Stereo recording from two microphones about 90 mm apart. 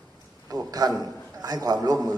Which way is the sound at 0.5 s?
45° right (ahead or behind).